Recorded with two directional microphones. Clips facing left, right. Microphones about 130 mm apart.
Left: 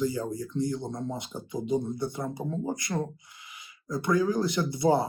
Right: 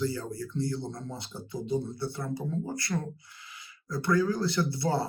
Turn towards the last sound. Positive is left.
turn(degrees=20)  # may be behind; listen again after turning